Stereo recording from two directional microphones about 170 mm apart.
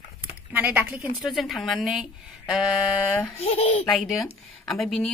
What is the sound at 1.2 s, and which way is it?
Speech, centre (ahead or behind).